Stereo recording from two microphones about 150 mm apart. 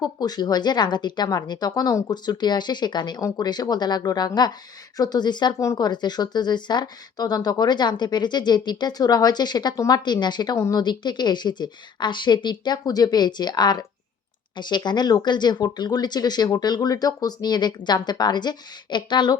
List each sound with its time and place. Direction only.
0.0 s speech: 25° left (ahead or behind)